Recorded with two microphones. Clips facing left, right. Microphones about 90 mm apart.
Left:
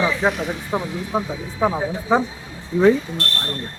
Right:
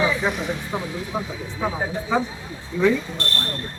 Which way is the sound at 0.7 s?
35° left (ahead or behind).